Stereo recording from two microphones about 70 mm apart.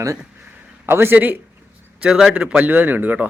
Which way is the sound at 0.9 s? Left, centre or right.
Right.